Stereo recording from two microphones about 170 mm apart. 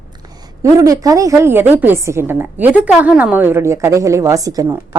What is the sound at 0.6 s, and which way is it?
A woman's voice, 20° right (ahead or behind).